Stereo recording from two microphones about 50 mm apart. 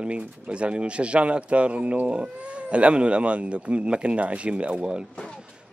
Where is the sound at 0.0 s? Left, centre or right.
Right.